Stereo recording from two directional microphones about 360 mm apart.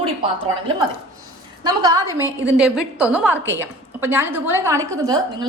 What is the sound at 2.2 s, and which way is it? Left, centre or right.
Speech, centre.